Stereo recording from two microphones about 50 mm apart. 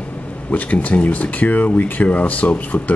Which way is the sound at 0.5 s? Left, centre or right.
Left.